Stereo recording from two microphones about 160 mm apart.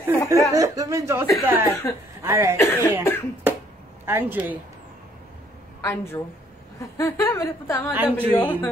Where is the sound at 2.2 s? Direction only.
15° right (ahead or behind).